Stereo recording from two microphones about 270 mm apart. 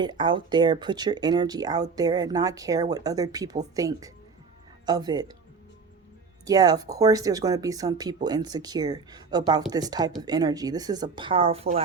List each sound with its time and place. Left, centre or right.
0.0 s speech: centre
6.4 s speech: centre